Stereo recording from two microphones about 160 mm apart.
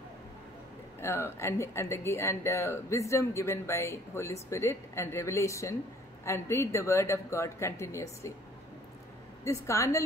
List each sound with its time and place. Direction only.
1.0 s speech: 15° left (ahead or behind)
9.4 s a woman's voice: 20° left (ahead or behind)